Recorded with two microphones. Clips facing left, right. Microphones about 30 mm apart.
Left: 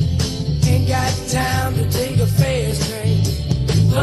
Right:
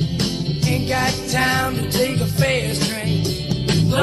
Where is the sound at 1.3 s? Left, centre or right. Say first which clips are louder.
Right 2 dB; right.